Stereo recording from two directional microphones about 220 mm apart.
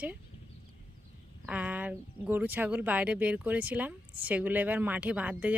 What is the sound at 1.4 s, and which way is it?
Speech, 5° right (ahead or behind).